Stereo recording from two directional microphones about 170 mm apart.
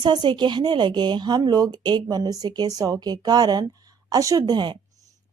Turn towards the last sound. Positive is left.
turn(degrees=-25)  # may be behind; listen again after turning